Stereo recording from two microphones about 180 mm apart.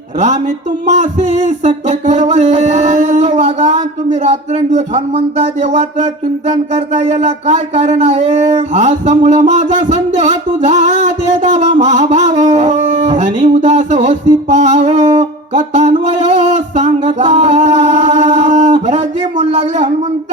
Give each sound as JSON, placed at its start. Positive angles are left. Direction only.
{"t": 0.9, "sound": "speech", "side_deg": -40}